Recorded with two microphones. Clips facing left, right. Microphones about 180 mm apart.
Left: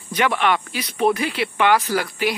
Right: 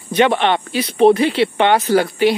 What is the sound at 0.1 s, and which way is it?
Speech, 25° right (ahead or behind).